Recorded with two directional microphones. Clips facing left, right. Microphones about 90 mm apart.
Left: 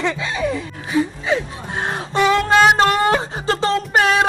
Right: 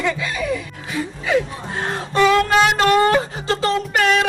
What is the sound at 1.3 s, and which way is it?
Snicker, 25° left (ahead or behind).